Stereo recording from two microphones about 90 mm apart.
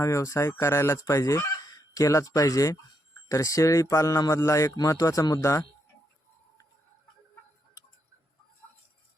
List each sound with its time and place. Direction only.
0.0 s speech: 35° left (ahead or behind)